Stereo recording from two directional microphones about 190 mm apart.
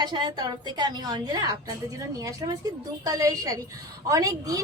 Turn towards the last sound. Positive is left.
turn(degrees=-20)  # may be behind; listen again after turning